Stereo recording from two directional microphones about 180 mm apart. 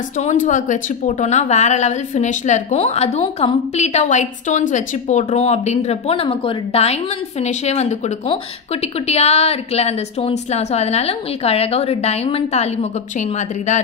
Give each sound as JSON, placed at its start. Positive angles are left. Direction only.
{"t": 0.2, "sound": "a woman's voice", "side_deg": 40}